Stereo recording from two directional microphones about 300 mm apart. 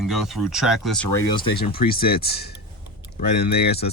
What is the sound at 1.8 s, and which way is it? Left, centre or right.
Speech, left.